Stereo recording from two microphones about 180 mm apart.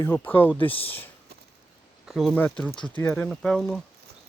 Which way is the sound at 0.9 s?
10° left (ahead or behind).